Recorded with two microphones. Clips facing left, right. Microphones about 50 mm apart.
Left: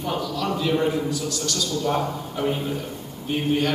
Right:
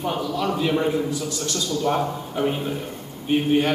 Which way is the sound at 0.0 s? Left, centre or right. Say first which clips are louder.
Right 2 dB; centre.